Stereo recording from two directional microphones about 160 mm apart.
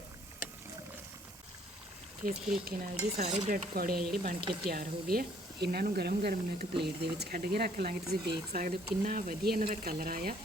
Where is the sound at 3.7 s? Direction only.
65° right (ahead or behind).